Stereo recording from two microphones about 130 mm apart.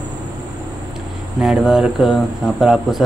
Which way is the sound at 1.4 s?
5° right (ahead or behind).